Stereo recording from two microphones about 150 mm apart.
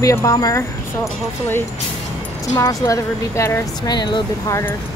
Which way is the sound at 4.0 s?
30° left (ahead or behind).